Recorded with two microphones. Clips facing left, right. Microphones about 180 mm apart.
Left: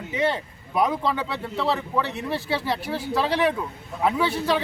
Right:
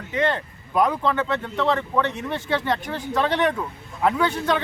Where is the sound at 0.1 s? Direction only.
10° left (ahead or behind).